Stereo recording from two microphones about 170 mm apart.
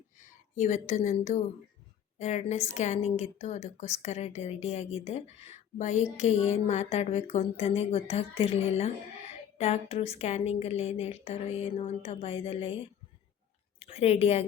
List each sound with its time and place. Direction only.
0.2 s a woman's voice: 45° left (ahead or behind)